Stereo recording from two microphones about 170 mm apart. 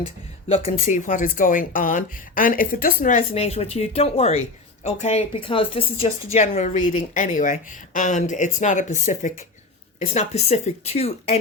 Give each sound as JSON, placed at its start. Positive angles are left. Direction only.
{"t": 0.0, "sound": "speech", "side_deg": 35}